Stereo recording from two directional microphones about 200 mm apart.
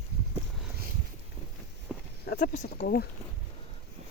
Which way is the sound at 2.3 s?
40° left (ahead or behind).